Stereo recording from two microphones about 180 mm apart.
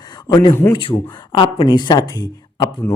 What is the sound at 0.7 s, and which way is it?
Speech, 30° left (ahead or behind).